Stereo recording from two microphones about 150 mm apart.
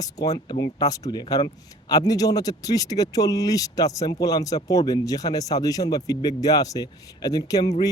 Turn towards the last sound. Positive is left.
turn(degrees=25)  # may be behind; listen again after turning